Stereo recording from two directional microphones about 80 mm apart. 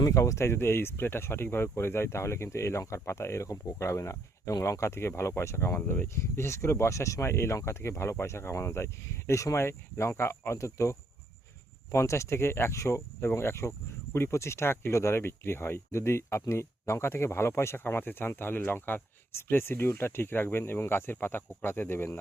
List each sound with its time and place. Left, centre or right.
0.0 s speech: left